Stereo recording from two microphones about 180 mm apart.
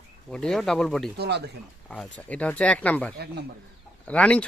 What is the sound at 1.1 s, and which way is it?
Speech, 65° right (ahead or behind).